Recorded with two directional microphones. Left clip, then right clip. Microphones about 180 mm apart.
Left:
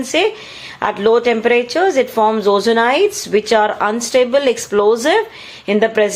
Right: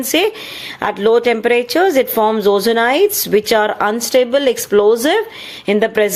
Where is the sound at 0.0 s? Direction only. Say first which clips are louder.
Even; 45° right (ahead or behind).